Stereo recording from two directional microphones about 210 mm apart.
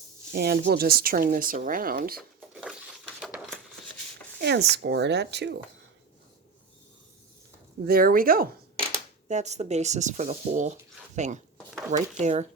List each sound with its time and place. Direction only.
0.3 s speech: 50° right (ahead or behind)
3.2 s a sound: centre (ahead or behind)
4.4 s speech: 55° right (ahead or behind)
7.9 s speech: 45° right (ahead or behind)
9.3 s speech: 30° right (ahead or behind)